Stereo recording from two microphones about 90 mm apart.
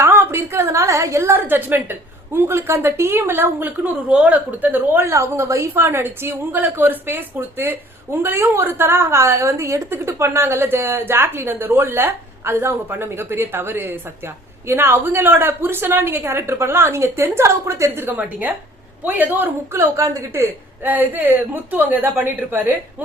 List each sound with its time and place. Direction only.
0.0 s a woman's voice: 30° right (ahead or behind)